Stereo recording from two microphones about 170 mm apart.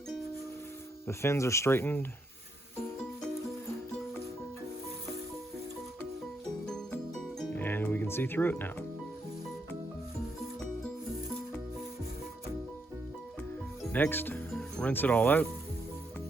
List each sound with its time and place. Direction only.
1.0 s speech: 15° left (ahead or behind)
6.7 s music: 5° left (ahead or behind)
13.9 s speech: 10° left (ahead or behind)